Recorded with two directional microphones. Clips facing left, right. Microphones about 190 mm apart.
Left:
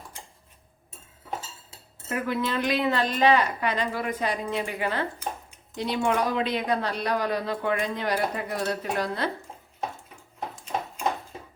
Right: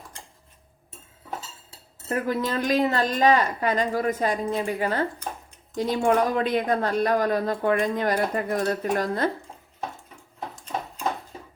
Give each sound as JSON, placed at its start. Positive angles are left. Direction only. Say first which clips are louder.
{"t": 2.0, "sound": "speech", "louder": "right 2 dB", "side_deg": -40}